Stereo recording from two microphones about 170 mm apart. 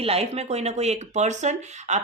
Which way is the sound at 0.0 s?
35° right (ahead or behind).